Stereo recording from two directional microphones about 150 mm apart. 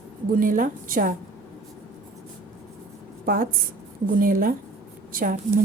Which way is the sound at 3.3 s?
75° right (ahead or behind).